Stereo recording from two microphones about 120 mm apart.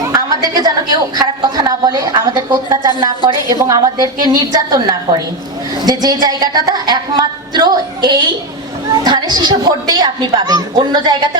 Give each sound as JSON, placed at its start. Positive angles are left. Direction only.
{"t": 0.0, "sound": "a woman's voice", "side_deg": -30}